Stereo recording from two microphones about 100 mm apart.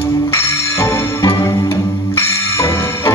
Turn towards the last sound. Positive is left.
turn(degrees=25)  # may be behind; listen again after turning